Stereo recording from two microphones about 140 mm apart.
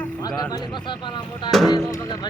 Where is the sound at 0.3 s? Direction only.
30° left (ahead or behind).